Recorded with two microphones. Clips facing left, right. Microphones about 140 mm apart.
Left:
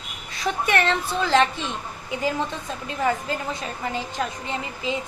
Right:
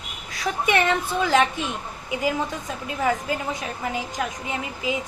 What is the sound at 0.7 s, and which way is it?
A woman's voice, 15° right (ahead or behind).